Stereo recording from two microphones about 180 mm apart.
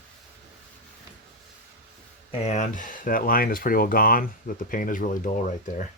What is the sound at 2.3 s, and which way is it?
Speech, 40° left (ahead or behind).